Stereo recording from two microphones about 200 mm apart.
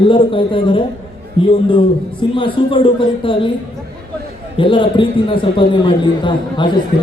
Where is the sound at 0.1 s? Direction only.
25° left (ahead or behind).